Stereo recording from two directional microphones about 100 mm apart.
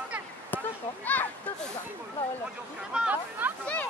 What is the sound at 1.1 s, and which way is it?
Speech, 15° left (ahead or behind).